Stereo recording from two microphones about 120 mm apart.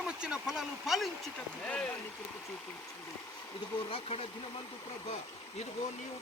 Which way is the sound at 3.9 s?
55° left (ahead or behind).